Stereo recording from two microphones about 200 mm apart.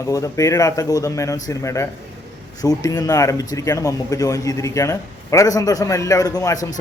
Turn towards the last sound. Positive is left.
turn(degrees=15)  # may be behind; listen again after turning